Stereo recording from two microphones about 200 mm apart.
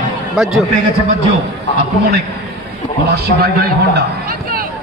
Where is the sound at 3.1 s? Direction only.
55° right (ahead or behind).